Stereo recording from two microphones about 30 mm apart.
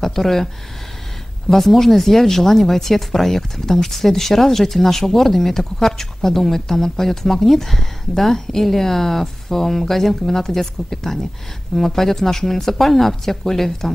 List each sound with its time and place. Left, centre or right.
0.0 s speech: centre
1.5 s speech: centre